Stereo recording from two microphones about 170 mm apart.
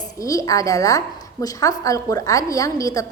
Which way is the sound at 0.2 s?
20° left (ahead or behind).